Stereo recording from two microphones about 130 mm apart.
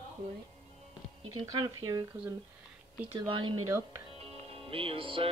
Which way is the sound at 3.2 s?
40° right (ahead or behind).